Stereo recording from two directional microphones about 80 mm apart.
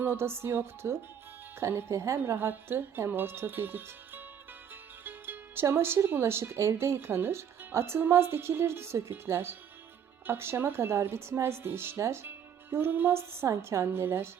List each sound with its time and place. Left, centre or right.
0.0 s speech: right
4.7 s music: right
5.6 s speech: right